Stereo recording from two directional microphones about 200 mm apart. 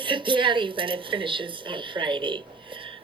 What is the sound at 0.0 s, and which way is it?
Speech, 25° right (ahead or behind).